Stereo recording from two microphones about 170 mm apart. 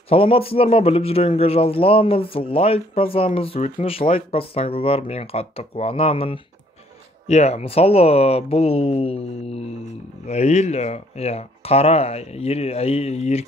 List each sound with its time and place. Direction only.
0.1 s a man's voice: 35° left (ahead or behind)